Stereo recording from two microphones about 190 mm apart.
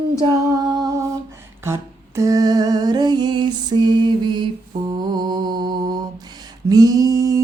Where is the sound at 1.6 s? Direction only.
15° right (ahead or behind).